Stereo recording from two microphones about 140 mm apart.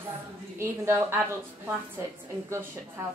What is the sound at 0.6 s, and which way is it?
A woman's voice, 15° right (ahead or behind).